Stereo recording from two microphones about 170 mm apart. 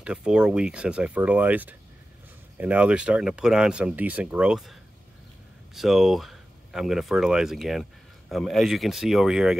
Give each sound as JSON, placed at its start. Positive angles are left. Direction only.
{"t": 0.0, "sound": "speech", "side_deg": -5}
{"t": 5.8, "sound": "speech", "side_deg": 0}